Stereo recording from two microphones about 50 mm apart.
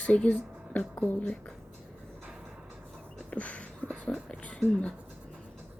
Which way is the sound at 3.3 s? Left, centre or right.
Left.